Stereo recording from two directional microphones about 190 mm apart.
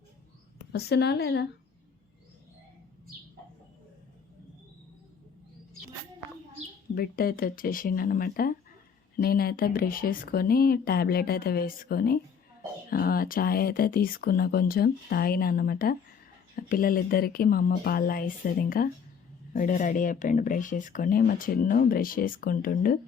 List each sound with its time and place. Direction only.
0.7 s a woman's voice: 60° left (ahead or behind)
6.9 s speech: 50° left (ahead or behind)